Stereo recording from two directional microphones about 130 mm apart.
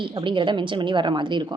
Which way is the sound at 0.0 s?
40° right (ahead or behind).